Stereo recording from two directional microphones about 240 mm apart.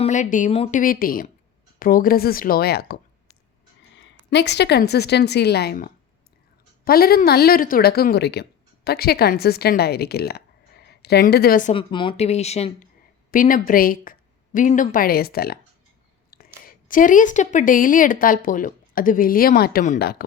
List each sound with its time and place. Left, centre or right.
0.0 s a woman's voice: left
11.7 s speech: left
16.3 s a sound: left
16.6 s speech: left